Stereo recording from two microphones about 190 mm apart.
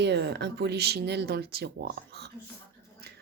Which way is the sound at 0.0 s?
60° right (ahead or behind).